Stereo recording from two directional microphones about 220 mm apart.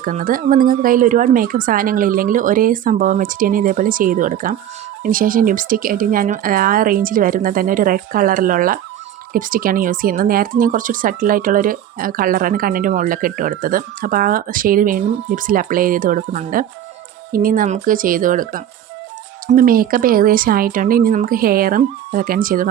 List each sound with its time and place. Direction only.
0.0 s speech: 40° right (ahead or behind)